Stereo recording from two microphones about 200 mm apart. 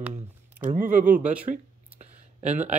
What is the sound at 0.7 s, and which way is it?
Speech, 40° right (ahead or behind).